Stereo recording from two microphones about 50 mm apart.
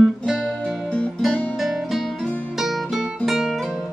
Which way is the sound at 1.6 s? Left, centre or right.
Centre.